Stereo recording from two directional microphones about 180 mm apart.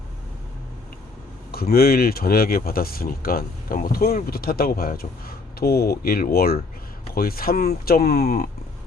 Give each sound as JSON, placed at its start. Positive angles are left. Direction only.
{"t": 1.7, "sound": "speech", "side_deg": 60}